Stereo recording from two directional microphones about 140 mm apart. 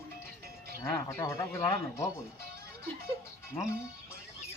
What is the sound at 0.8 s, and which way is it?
Speech, 25° left (ahead or behind).